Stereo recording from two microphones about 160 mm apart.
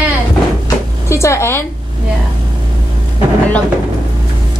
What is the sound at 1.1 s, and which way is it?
Speech, 15° left (ahead or behind).